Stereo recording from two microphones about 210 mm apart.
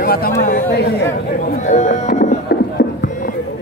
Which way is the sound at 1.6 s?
35° left (ahead or behind).